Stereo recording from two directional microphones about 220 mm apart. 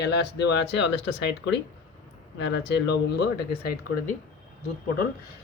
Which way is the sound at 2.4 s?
50° left (ahead or behind).